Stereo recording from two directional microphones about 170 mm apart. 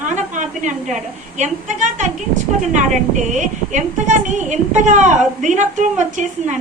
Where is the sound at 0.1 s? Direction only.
45° right (ahead or behind).